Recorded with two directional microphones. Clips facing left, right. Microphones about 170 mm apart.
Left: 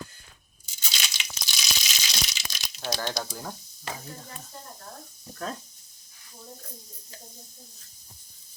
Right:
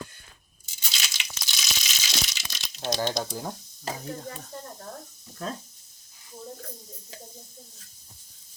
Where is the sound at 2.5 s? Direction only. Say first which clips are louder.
Even; centre (ahead or behind).